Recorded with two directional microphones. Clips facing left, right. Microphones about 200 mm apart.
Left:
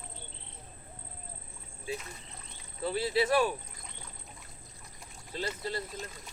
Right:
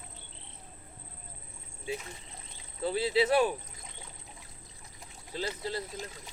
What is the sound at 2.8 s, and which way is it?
Speech, 20° right (ahead or behind).